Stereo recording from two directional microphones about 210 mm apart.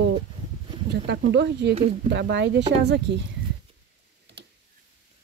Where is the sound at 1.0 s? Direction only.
55° right (ahead or behind).